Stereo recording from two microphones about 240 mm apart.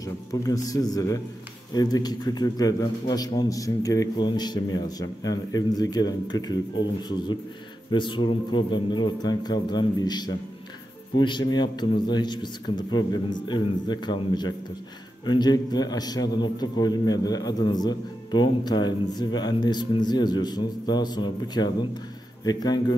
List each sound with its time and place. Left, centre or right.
0.0 s a man's voice: centre